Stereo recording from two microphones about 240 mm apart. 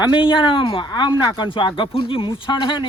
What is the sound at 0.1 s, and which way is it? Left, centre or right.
Speech, left.